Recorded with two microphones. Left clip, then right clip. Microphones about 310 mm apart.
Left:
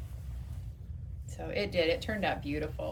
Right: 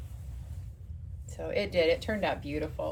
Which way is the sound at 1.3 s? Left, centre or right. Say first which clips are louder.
Right 3 dB; centre.